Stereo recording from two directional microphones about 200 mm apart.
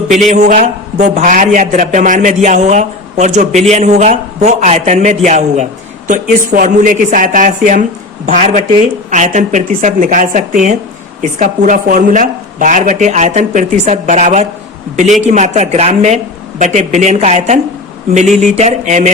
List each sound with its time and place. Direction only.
0.4 s a man's voice: 35° right (ahead or behind)